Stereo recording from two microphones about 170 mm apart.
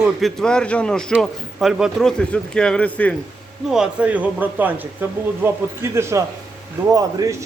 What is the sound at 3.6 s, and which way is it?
A man's voice, 5° right (ahead or behind).